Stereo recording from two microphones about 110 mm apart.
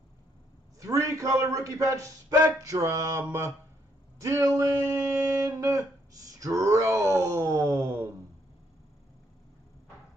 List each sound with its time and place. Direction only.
0.7 s speech: 30° right (ahead or behind)